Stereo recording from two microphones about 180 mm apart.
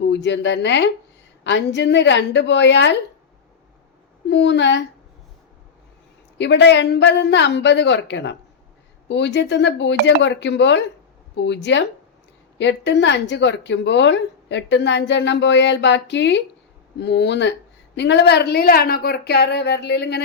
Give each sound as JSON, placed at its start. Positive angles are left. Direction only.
{"t": 0.1, "sound": "speech", "side_deg": 75}
{"t": 4.3, "sound": "speech", "side_deg": 70}
{"t": 6.4, "sound": "a woman's voice", "side_deg": 75}